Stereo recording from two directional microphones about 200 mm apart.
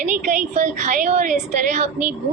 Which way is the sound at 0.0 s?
40° right (ahead or behind).